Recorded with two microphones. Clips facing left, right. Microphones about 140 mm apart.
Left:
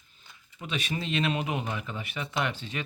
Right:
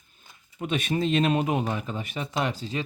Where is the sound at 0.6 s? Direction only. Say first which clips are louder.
Right 7 dB; 50° right (ahead or behind).